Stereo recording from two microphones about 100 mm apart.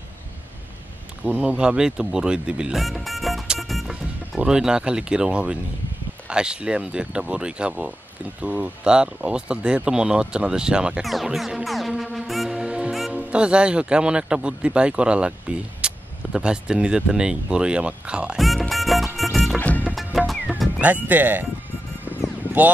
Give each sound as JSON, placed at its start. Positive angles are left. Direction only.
{"t": 1.4, "sound": "speech", "side_deg": -10}
{"t": 15.8, "sound": "vehicle", "side_deg": -10}
{"t": 16.3, "sound": "speech", "side_deg": -10}
{"t": 19.1, "sound": "music", "side_deg": 0}
{"t": 20.8, "sound": "speech", "side_deg": -15}